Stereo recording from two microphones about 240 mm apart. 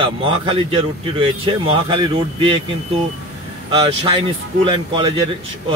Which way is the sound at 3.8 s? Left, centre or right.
Centre.